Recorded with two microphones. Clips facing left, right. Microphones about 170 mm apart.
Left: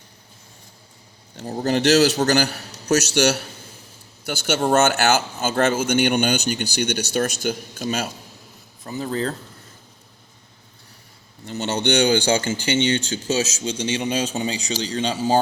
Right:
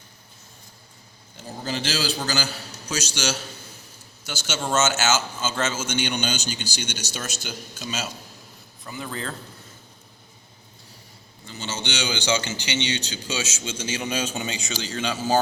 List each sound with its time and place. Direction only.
1.6 s a man's voice: 65° left (ahead or behind)
8.9 s speech: 35° left (ahead or behind)
11.4 s speech: 65° left (ahead or behind); by 15.4 s 30° left (ahead or behind)